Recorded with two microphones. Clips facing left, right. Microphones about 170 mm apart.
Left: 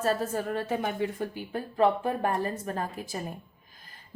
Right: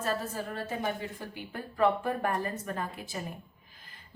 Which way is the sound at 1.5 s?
30° left (ahead or behind).